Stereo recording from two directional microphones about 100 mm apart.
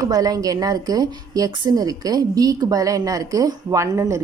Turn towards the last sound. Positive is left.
turn(degrees=-35)  # may be behind; listen again after turning